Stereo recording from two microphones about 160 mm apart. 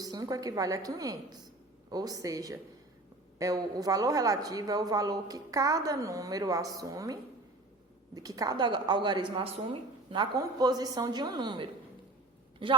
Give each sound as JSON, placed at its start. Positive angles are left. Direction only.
{"t": 0.0, "sound": "a woman's voice", "side_deg": -25}
{"t": 10.3, "sound": "speech", "side_deg": -20}